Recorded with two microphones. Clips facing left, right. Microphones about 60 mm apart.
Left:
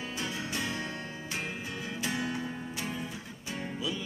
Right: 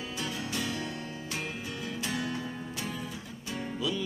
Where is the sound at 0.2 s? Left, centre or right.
Left.